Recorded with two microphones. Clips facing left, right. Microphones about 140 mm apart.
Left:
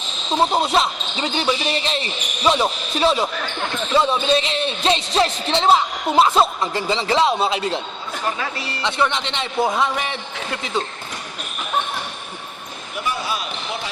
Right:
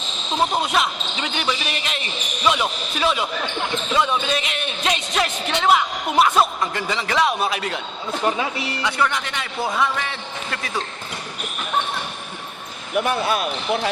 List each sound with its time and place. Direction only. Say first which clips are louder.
0.5 s a man's voice: left 3 dB; 30° left (ahead or behind)
8.2 s speech: right 3 dB; 20° right (ahead or behind)
8.8 s a man's voice: left 2 dB; 25° left (ahead or behind)
13.0 s speech: right 5 dB; 55° right (ahead or behind)